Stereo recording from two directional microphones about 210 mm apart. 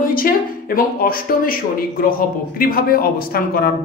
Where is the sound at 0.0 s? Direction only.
45° left (ahead or behind).